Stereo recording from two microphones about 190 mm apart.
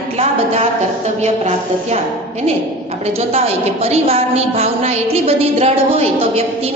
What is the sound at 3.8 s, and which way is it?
A woman's voice, 30° right (ahead or behind).